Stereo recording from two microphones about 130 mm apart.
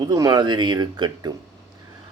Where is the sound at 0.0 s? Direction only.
30° right (ahead or behind).